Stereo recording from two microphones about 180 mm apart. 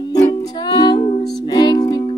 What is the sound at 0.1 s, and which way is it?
Music, 20° left (ahead or behind).